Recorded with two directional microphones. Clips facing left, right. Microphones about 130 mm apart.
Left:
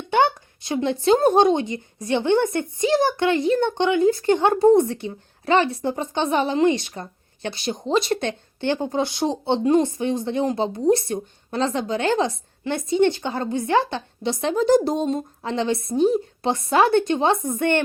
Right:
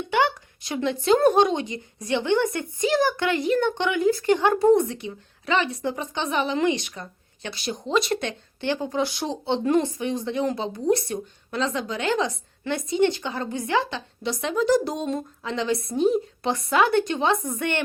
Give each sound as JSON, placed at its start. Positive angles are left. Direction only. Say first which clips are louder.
{"t": 0.1, "sound": "a woman's voice", "louder": "left 4 dB", "side_deg": 25}
{"t": 4.9, "sound": "a woman's voice", "louder": "left 4 dB", "side_deg": 35}